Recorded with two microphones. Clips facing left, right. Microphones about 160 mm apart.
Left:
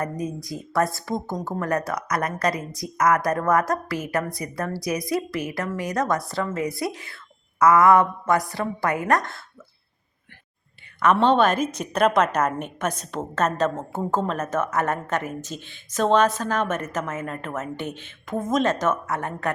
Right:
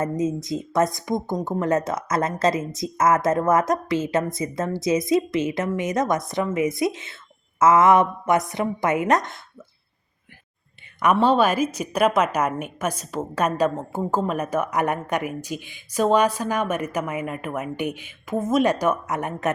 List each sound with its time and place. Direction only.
0.0 s a woman's voice: 20° right (ahead or behind)
11.0 s a woman's voice: 10° right (ahead or behind)